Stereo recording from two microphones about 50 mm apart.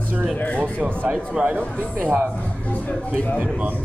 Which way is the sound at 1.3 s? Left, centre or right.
Right.